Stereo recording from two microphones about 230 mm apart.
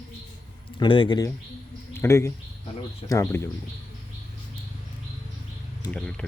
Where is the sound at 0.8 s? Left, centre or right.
Left.